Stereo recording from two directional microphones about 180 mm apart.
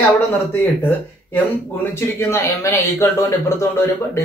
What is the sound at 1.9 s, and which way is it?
Speech, 15° left (ahead or behind).